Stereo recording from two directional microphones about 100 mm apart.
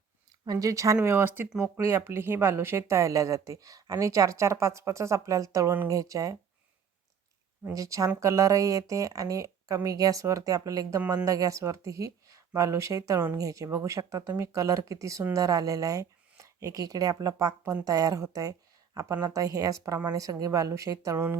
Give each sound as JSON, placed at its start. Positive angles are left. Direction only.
{"t": 0.4, "sound": "speech", "side_deg": -40}
{"t": 1.0, "sound": "speech", "side_deg": -20}
{"t": 7.6, "sound": "speech", "side_deg": -35}